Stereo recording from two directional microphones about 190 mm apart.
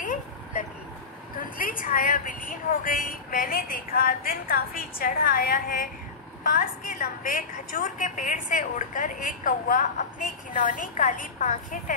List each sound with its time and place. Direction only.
0.0 s vehicle: 45° left (ahead or behind)
1.4 s a woman's voice: 45° left (ahead or behind)